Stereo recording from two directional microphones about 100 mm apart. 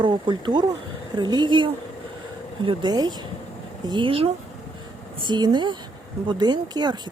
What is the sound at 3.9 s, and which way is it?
Speech, 60° right (ahead or behind).